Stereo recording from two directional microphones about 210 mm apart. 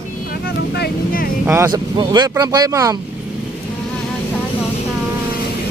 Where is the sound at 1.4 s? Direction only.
10° right (ahead or behind).